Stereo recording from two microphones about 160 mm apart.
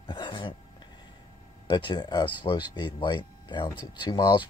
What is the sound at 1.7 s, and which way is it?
Speech, 30° left (ahead or behind).